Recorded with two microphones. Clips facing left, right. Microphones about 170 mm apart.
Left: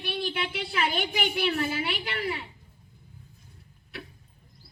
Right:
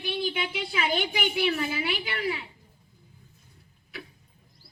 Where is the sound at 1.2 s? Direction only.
55° left (ahead or behind).